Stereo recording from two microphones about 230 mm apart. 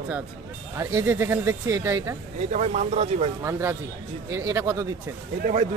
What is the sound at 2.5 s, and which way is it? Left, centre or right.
Speech, right.